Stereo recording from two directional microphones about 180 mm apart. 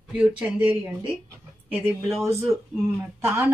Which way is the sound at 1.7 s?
10° right (ahead or behind).